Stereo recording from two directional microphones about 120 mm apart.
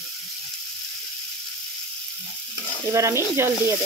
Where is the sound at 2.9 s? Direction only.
20° right (ahead or behind).